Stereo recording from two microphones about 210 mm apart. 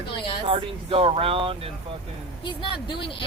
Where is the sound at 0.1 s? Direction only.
25° left (ahead or behind).